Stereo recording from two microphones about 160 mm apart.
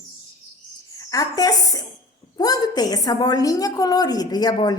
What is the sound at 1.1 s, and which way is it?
A woman's voice, 20° left (ahead or behind).